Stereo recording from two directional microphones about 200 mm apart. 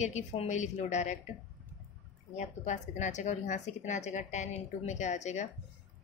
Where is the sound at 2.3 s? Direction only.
35° left (ahead or behind).